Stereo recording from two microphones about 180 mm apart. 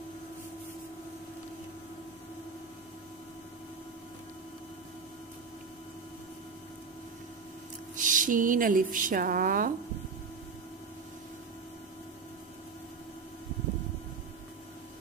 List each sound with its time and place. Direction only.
7.9 s a woman's voice: 45° right (ahead or behind)